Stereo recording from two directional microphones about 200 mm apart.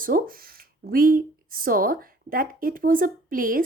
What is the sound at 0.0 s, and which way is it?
Speech, 45° right (ahead or behind).